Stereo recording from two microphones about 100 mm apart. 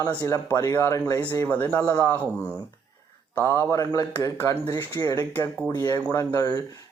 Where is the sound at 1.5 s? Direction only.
15° left (ahead or behind).